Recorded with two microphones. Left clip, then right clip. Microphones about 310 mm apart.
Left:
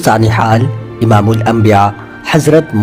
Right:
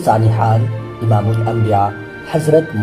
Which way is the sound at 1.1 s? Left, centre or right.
Left.